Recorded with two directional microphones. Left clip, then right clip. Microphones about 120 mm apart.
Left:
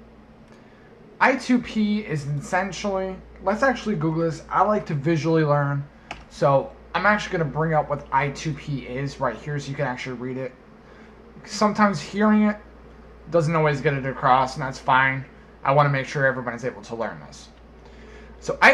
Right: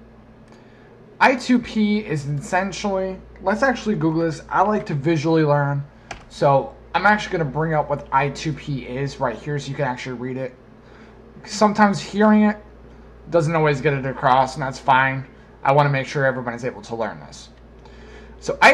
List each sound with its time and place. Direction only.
1.1 s speech: 40° right (ahead or behind)
18.4 s a man's voice: 40° right (ahead or behind)